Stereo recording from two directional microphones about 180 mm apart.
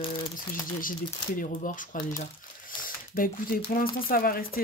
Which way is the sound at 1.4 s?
50° left (ahead or behind).